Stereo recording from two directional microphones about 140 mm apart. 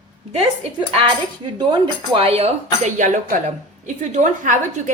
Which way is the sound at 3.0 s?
65° right (ahead or behind).